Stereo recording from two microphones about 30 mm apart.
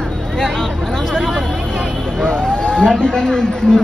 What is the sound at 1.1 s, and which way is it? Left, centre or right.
Speech, left.